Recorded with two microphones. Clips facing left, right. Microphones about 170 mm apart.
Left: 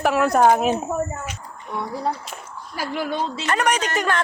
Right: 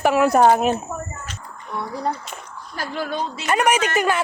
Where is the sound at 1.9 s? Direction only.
5° left (ahead or behind).